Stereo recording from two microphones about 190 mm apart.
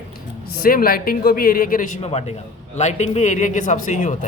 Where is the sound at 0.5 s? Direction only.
50° left (ahead or behind).